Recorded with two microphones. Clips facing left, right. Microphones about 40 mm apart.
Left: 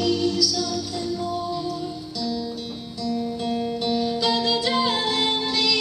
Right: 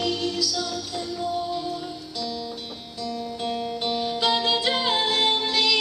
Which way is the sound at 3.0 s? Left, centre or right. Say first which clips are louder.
Left 3 dB; right.